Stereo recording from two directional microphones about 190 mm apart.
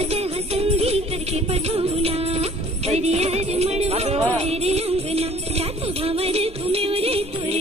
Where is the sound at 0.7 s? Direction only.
35° right (ahead or behind).